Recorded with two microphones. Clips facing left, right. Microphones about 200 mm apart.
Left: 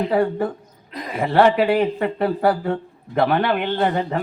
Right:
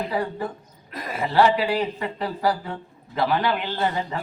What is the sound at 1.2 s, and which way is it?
Speech, 55° left (ahead or behind).